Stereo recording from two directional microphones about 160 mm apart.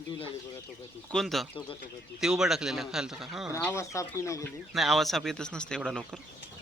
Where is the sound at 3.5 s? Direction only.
15° left (ahead or behind).